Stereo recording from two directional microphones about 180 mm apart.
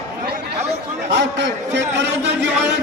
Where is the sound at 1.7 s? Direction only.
75° right (ahead or behind).